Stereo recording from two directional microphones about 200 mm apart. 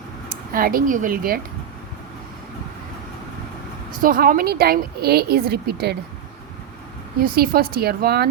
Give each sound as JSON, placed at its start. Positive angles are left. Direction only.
{"t": 0.5, "sound": "a woman's voice", "side_deg": -45}
{"t": 4.0, "sound": "a woman's voice", "side_deg": -45}
{"t": 7.2, "sound": "a woman's voice", "side_deg": -50}